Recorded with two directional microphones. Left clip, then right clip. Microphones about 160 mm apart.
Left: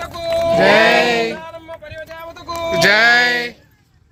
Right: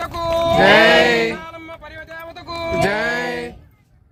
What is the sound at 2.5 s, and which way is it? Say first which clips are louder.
Speech: left 6 dB; centre (ahead or behind).